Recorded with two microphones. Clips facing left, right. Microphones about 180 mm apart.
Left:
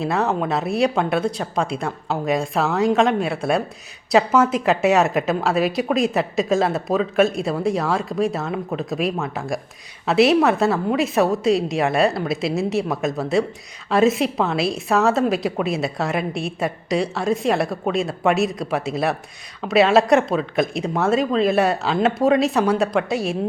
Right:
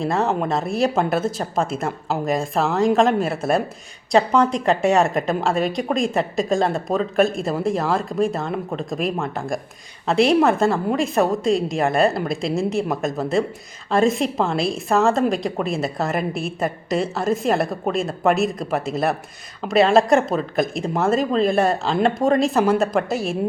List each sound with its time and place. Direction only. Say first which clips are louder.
0.0 s a woman's voice: even; centre (ahead or behind)